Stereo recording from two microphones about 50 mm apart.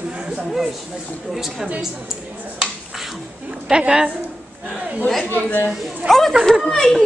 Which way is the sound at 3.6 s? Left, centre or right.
Centre.